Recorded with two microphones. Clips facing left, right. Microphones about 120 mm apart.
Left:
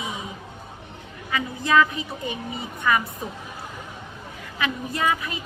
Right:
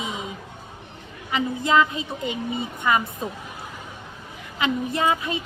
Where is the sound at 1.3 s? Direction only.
25° right (ahead or behind).